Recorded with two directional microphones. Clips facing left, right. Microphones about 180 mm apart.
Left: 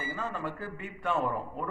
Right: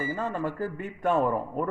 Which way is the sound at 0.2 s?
40° right (ahead or behind).